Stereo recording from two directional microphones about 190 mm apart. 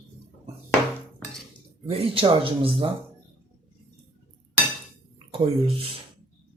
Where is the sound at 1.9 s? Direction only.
30° right (ahead or behind).